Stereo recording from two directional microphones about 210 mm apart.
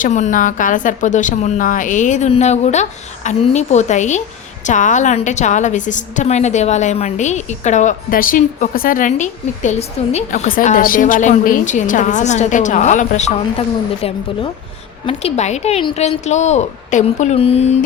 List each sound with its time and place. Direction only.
0.0 s a woman's voice: 35° left (ahead or behind)
15.0 s a woman's voice: 30° left (ahead or behind)